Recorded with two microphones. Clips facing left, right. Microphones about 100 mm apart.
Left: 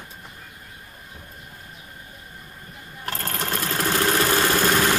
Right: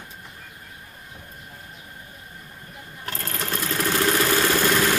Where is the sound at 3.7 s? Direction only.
25° left (ahead or behind).